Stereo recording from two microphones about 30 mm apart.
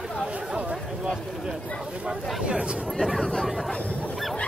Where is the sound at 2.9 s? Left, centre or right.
Centre.